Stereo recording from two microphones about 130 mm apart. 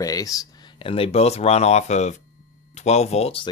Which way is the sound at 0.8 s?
45° left (ahead or behind).